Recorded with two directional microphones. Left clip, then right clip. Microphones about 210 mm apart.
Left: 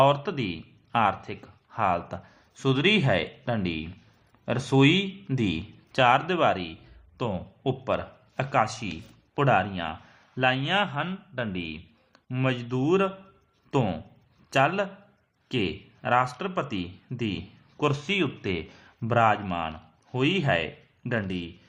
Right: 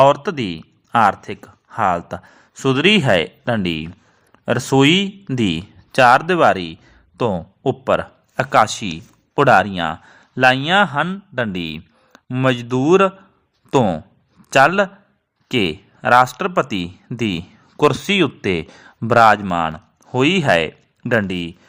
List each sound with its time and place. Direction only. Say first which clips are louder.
0.0 s a man's voice: right 9 dB; 35° right (ahead or behind)